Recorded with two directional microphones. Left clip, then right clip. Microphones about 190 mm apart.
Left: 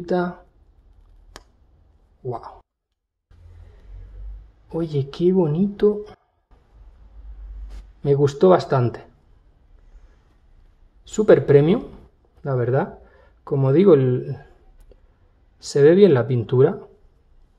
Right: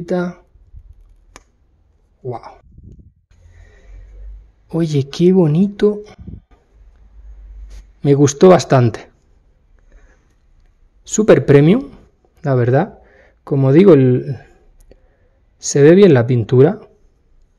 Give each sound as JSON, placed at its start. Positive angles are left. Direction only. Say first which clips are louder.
{"t": 0.0, "sound": "speech", "louder": "right 2 dB", "side_deg": -20}
{"t": 1.3, "sound": "a sound", "louder": "right 1 dB", "side_deg": 5}
{"t": 2.2, "sound": "speech", "louder": "right 3 dB", "side_deg": -20}
{"t": 4.6, "sound": "speech", "louder": "right 6 dB", "side_deg": -45}
{"t": 8.0, "sound": "speech", "louder": "right 6 dB", "side_deg": -45}
{"t": 11.1, "sound": "speech", "louder": "right 4 dB", "side_deg": -35}
{"t": 12.4, "sound": "a sound", "louder": "right 6 dB", "side_deg": -40}
{"t": 15.6, "sound": "speech", "louder": "right 5 dB", "side_deg": -35}